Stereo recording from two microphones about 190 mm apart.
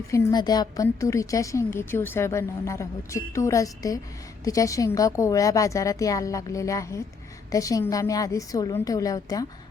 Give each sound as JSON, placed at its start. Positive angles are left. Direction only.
{"t": 0.1, "sound": "a woman's voice", "side_deg": 20}